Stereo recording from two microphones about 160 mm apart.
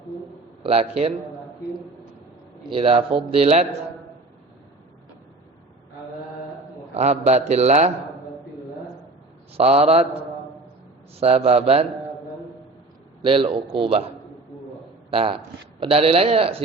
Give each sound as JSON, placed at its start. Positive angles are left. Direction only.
{"t": 0.6, "sound": "speech", "side_deg": -40}
{"t": 2.6, "sound": "speech", "side_deg": -35}
{"t": 7.0, "sound": "a man's voice", "side_deg": -45}
{"t": 9.6, "sound": "speech", "side_deg": -40}
{"t": 11.2, "sound": "speech", "side_deg": -40}
{"t": 13.2, "sound": "speech", "side_deg": -35}
{"t": 15.1, "sound": "speech", "side_deg": -35}